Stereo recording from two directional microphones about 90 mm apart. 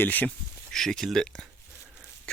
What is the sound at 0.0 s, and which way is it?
Speech, 20° left (ahead or behind).